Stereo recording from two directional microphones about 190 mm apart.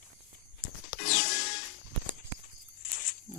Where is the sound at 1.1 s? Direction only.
50° left (ahead or behind).